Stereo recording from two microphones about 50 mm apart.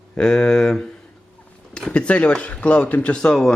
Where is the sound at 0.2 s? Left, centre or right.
Centre.